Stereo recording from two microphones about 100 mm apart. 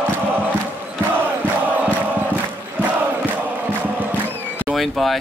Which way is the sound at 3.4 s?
20° right (ahead or behind).